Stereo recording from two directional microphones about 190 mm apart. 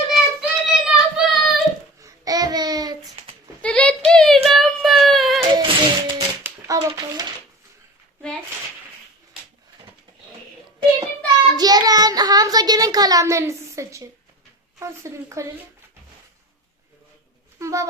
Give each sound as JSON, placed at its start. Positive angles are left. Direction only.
{"t": 0.1, "sound": "child singing", "side_deg": -5}
{"t": 2.0, "sound": "child singing", "side_deg": -20}
{"t": 3.6, "sound": "a sound", "side_deg": 5}
{"t": 5.4, "sound": "music", "side_deg": -25}
{"t": 6.4, "sound": "hands", "side_deg": -20}
{"t": 11.5, "sound": "child singing", "side_deg": -20}
{"t": 14.8, "sound": "speech", "side_deg": -15}
{"t": 17.6, "sound": "a sound", "side_deg": -15}